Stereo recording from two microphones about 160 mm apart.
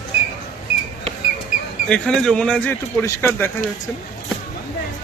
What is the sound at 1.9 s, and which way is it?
A man's voice, 5° left (ahead or behind).